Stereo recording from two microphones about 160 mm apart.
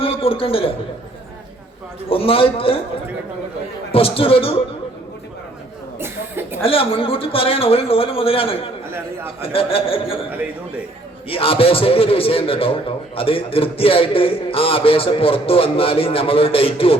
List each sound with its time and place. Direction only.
0.0 s a man's voice: 35° left (ahead or behind)
2.0 s a man's voice: 35° left (ahead or behind)
3.9 s a man's voice: 35° left (ahead or behind)
6.0 s cough: 15° right (ahead or behind)
6.6 s a man's voice: 35° left (ahead or behind)
8.9 s a man's voice: 15° right (ahead or behind)
9.4 s a man's voice: 35° left (ahead or behind)
11.3 s a man's voice: 35° left (ahead or behind)